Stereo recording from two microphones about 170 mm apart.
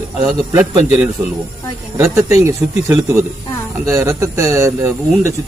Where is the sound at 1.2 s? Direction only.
20° right (ahead or behind).